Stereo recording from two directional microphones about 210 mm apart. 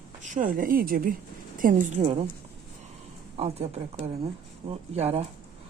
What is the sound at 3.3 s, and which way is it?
A woman's voice, 30° right (ahead or behind).